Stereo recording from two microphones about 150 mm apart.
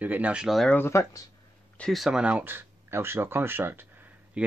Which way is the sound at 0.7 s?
15° left (ahead or behind).